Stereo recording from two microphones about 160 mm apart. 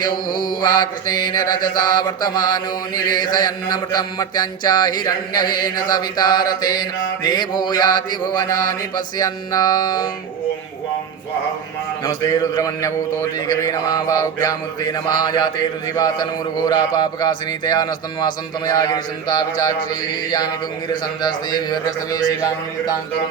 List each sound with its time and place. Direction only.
0.0 s mantra: 25° left (ahead or behind)
12.0 s mantra: 25° left (ahead or behind)
20.9 s mantra: 25° left (ahead or behind)